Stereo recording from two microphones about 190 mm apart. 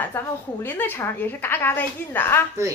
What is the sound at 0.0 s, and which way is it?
A woman's voice, 10° left (ahead or behind).